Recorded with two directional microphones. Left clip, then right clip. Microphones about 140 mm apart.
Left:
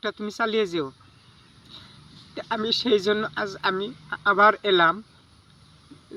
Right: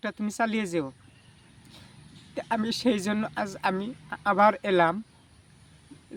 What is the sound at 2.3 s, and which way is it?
Speech, 45° right (ahead or behind).